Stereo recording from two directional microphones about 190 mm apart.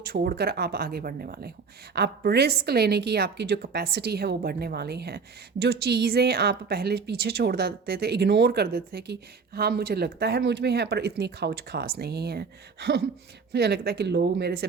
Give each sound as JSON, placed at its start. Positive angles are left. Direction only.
{"t": 0.1, "sound": "a woman's voice", "side_deg": -55}